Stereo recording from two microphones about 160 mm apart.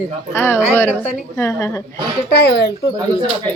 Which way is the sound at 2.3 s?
80° left.